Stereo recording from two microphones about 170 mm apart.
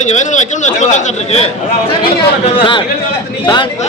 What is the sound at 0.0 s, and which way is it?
A man's voice, 45° left (ahead or behind).